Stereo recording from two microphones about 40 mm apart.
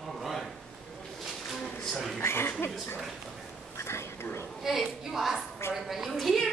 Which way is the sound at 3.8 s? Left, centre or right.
Left.